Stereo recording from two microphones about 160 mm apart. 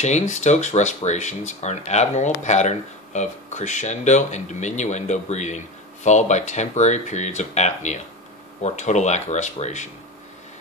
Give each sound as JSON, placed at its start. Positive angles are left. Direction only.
{"t": 0.0, "sound": "speech", "side_deg": 45}